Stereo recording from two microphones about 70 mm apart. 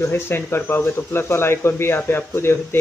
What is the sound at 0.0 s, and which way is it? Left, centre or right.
Speech, left.